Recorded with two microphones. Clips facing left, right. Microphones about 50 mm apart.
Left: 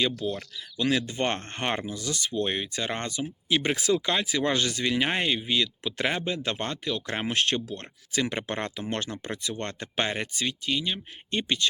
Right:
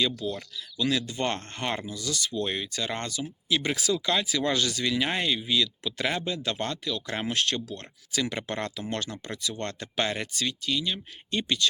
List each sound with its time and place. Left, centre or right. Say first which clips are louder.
0.2 s speech: left 1 dB; left